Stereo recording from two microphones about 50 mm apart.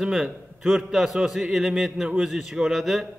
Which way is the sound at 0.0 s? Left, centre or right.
Centre.